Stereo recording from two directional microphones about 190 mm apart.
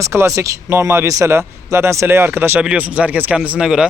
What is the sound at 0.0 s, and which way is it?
Speech, 15° right (ahead or behind).